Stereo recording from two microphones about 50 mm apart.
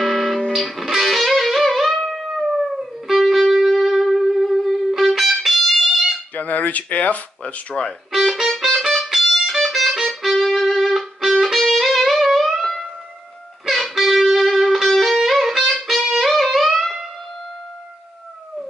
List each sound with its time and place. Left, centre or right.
0.0 s music: centre
5.9 s music: centre
6.3 s speech: left
8.1 s music: centre